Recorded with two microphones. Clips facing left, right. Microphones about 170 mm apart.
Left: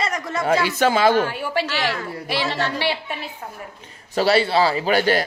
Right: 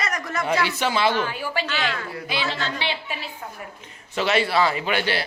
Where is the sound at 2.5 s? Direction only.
65° left (ahead or behind).